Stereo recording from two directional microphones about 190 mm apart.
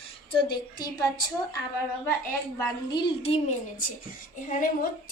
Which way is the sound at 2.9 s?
25° left (ahead or behind).